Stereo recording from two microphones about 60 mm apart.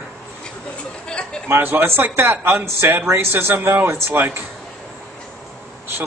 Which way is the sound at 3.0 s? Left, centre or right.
Right.